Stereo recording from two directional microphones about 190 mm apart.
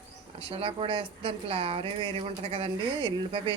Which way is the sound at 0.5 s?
30° right (ahead or behind).